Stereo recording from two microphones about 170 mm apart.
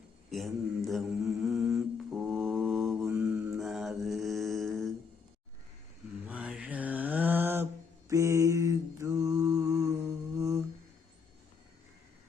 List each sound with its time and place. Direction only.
0.3 s mantra: centre (ahead or behind)
1.7 s music: centre (ahead or behind)
2.6 s mantra: centre (ahead or behind)
6.2 s mantra: 5° right (ahead or behind)